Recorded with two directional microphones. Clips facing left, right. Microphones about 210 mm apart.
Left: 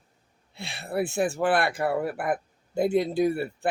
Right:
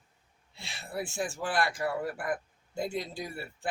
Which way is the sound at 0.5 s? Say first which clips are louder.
Left 8 dB; 60° left (ahead or behind).